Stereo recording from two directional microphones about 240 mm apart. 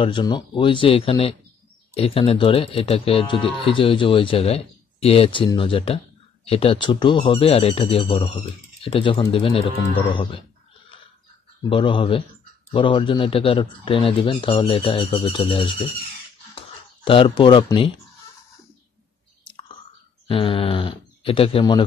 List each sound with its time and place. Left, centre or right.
0.0 s speech: centre
11.7 s speech: left
16.5 s a sound: left
17.4 s speech: left
20.2 s speech: left